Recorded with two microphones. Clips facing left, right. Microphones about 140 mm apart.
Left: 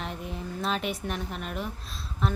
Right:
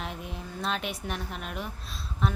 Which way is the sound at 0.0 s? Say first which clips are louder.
Left 2 dB; centre (ahead or behind).